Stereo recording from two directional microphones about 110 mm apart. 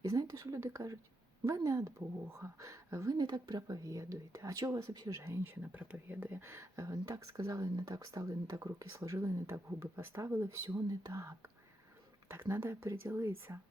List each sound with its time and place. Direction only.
0.0 s speech: 35° right (ahead or behind)